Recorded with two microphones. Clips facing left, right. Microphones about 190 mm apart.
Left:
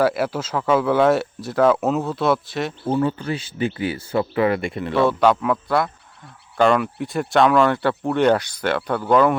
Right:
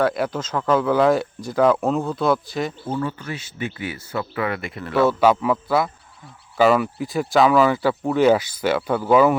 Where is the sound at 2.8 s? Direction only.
25° left (ahead or behind).